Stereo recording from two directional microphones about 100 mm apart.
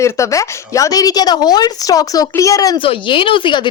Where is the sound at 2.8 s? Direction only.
60° left (ahead or behind).